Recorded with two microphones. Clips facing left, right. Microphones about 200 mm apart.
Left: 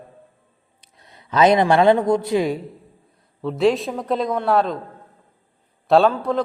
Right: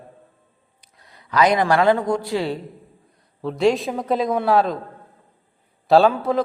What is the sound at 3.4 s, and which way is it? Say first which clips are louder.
A man's voice: even; centre (ahead or behind).